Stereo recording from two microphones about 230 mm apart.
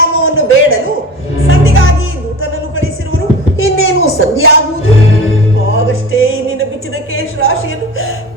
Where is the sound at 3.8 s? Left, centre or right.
Left.